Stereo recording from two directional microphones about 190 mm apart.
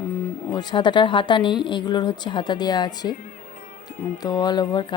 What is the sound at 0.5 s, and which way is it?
Speech, 20° left (ahead or behind).